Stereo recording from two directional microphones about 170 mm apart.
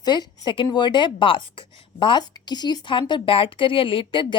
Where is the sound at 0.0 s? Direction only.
25° left (ahead or behind).